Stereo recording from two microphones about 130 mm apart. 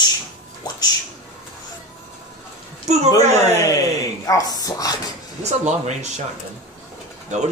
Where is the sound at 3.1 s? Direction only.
25° left (ahead or behind).